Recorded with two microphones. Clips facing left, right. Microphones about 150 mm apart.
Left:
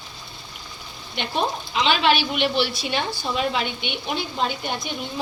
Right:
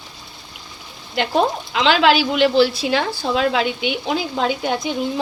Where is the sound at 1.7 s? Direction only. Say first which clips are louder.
Right 5 dB; 90° right.